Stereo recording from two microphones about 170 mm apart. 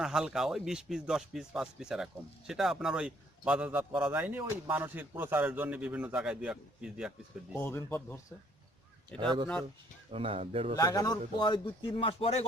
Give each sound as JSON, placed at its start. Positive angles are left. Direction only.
{"t": 0.0, "sound": "a man's voice", "side_deg": -5}
{"t": 7.5, "sound": "speech", "side_deg": 15}
{"t": 9.1, "sound": "speech", "side_deg": -25}
{"t": 10.8, "sound": "a man's voice", "side_deg": 20}